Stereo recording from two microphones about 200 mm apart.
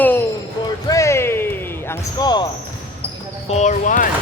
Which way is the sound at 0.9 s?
15° left (ahead or behind).